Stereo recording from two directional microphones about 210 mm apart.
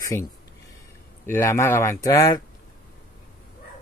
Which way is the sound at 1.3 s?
10° left (ahead or behind).